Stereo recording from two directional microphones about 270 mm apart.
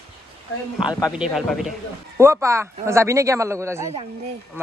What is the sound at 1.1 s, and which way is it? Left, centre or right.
A man's voice, centre.